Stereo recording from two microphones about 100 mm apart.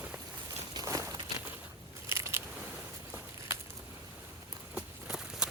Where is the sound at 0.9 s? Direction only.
35° right (ahead or behind).